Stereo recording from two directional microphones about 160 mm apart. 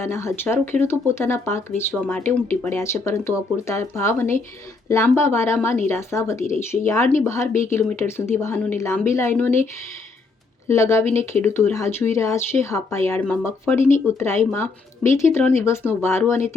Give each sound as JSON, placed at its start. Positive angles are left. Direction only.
{"t": 0.0, "sound": "speech", "side_deg": 15}
{"t": 10.7, "sound": "speech", "side_deg": 20}